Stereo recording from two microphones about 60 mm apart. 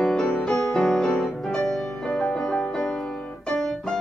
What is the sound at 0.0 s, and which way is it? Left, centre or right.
Music, centre.